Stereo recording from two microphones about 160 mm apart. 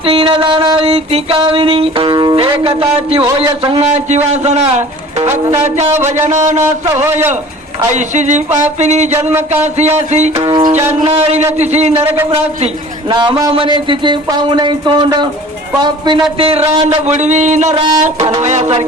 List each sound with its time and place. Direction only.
0.0 s a sound: 35° right (ahead or behind)
3.1 s a man's voice: 35° right (ahead or behind)
5.9 s a man's voice: 15° right (ahead or behind)
6.2 s a man's voice: 50° right (ahead or behind)
6.8 s a man's voice: 15° right (ahead or behind)
7.9 s a man's voice: 50° right (ahead or behind)
10.4 s speech: 30° right (ahead or behind)
11.0 s a man's voice: 40° right (ahead or behind)
11.9 s a man's voice: 15° right (ahead or behind)
12.3 s a sound: 40° right (ahead or behind)
13.1 s a man's voice: 25° right (ahead or behind); by 17.7 s 45° right (ahead or behind)
17.8 s speech: 30° right (ahead or behind)
18.3 s a man's voice: 45° right (ahead or behind)